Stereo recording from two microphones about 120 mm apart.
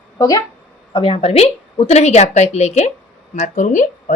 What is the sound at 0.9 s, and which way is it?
A woman's voice, 50° left (ahead or behind).